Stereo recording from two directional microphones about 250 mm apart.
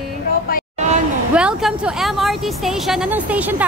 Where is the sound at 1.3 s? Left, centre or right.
Centre.